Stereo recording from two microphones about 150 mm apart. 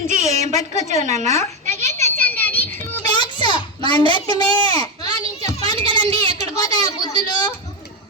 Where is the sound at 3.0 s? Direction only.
30° left (ahead or behind).